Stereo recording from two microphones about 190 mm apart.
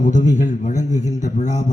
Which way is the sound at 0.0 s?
40° left (ahead or behind).